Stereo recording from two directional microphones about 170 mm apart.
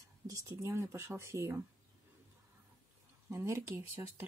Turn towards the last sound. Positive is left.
turn(degrees=-15)  # may be behind; listen again after turning